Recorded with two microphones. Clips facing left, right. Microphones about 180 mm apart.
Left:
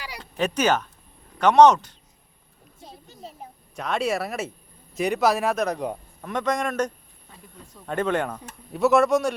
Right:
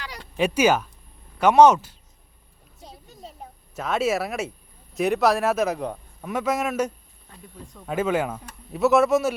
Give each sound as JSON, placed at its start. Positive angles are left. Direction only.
{"t": 0.2, "sound": "a man's voice", "side_deg": -10}
{"t": 2.8, "sound": "a sound", "side_deg": 0}
{"t": 3.8, "sound": "a man's voice", "side_deg": 0}